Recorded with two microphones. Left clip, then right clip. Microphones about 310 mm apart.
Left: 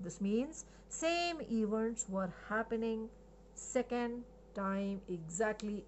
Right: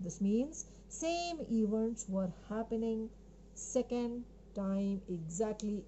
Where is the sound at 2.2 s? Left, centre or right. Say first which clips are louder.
Left 4 dB; centre.